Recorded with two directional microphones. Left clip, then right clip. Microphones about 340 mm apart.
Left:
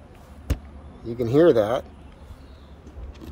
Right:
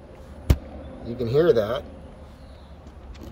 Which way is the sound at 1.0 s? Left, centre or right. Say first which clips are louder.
Left 2 dB; left.